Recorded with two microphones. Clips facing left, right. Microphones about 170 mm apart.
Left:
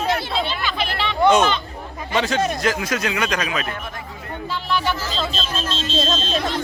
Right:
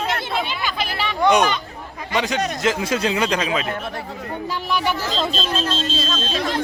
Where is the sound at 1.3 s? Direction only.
15° right (ahead or behind).